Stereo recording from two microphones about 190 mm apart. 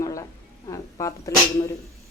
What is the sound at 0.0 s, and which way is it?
Music, 15° left (ahead or behind).